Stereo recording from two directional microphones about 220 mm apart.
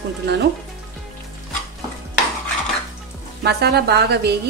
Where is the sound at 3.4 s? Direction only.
45° right (ahead or behind).